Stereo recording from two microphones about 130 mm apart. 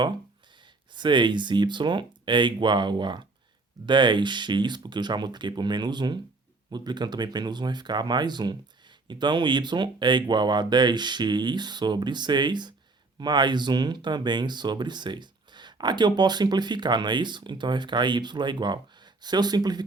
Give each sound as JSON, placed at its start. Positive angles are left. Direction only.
{"t": 0.9, "sound": "speech", "side_deg": -35}